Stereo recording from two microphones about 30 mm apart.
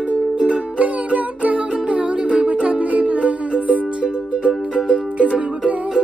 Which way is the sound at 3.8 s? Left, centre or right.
Right.